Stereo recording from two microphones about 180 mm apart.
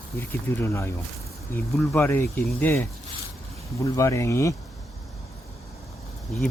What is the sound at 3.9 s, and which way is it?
Speech, 15° left (ahead or behind).